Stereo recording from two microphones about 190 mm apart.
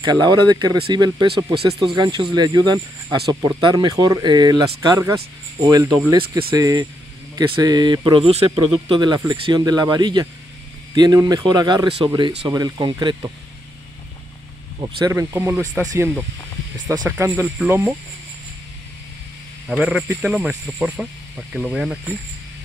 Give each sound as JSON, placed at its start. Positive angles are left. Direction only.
{"t": 0.0, "sound": "speech", "side_deg": -20}
{"t": 15.0, "sound": "speech", "side_deg": -15}
{"t": 19.7, "sound": "speech", "side_deg": -5}